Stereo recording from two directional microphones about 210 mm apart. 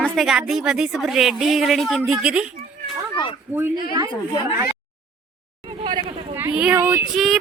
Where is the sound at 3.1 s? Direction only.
25° left (ahead or behind).